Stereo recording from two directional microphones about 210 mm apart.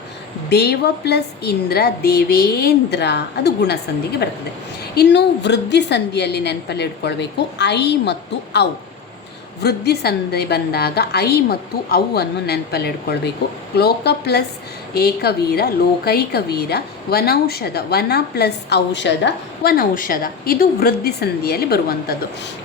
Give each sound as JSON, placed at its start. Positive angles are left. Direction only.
{"t": 0.5, "sound": "a woman's voice", "side_deg": 50}
{"t": 4.9, "sound": "a woman's voice", "side_deg": 55}